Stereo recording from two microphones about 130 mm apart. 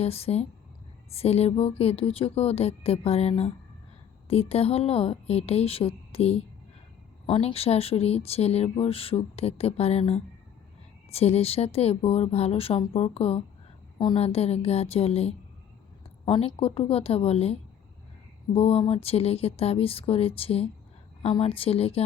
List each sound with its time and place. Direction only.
0.0 s speech: 50° left (ahead or behind)
16.2 s speech: 35° left (ahead or behind)